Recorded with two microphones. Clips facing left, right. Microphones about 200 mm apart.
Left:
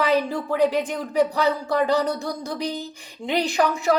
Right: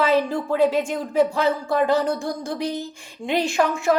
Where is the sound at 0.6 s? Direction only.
15° left (ahead or behind).